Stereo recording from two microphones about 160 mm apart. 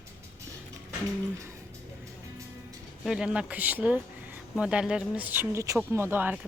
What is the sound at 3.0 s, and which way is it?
Speech, 5° right (ahead or behind).